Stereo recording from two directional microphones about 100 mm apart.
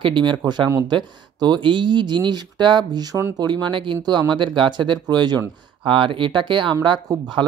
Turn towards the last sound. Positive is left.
turn(degrees=-35)  # may be behind; listen again after turning